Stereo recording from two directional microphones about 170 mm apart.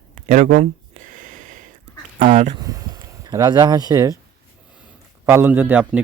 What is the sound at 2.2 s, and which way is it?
Speech, 45° right (ahead or behind).